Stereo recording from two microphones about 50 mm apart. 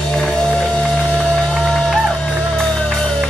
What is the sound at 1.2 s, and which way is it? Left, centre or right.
Music, centre.